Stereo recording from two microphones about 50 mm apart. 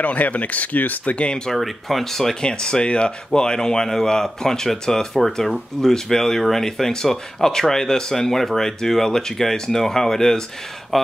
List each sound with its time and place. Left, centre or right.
0.0 s speech: left
1.5 s speech: centre